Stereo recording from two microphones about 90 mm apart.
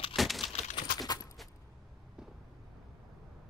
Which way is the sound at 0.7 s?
45° left (ahead or behind).